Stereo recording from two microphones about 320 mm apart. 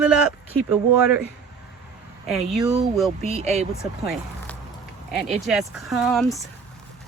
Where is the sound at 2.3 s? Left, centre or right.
Centre.